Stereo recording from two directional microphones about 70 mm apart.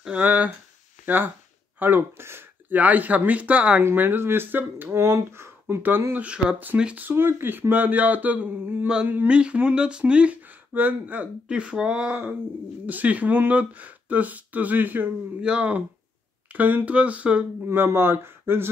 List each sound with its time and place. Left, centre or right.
0.1 s speech: right
2.8 s speech: right
3.8 s speech: right
4.9 s speech: right
5.8 s speech: right
7.1 s speech: right
17.6 s speech: right